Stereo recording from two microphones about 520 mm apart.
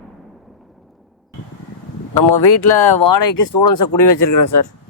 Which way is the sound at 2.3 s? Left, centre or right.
Left.